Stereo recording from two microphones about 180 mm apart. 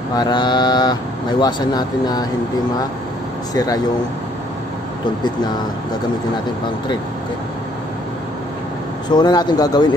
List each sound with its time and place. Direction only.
0.1 s mantra: 25° left (ahead or behind)
3.5 s mantra: 20° left (ahead or behind)
9.1 s mantra: 25° left (ahead or behind)